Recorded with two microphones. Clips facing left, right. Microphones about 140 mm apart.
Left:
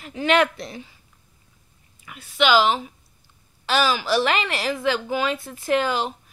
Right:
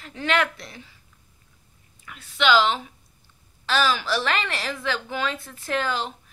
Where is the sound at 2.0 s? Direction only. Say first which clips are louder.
Left 2 dB; 15° left (ahead or behind).